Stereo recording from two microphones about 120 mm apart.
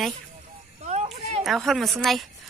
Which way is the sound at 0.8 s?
65° right (ahead or behind).